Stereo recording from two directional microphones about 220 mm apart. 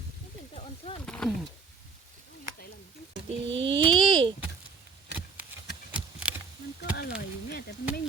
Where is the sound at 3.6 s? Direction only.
20° right (ahead or behind).